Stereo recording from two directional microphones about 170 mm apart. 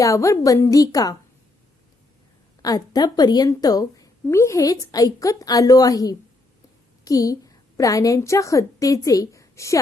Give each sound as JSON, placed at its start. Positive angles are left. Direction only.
{"t": 0.0, "sound": "a woman's voice", "side_deg": 20}
{"t": 2.6, "sound": "a woman's voice", "side_deg": 20}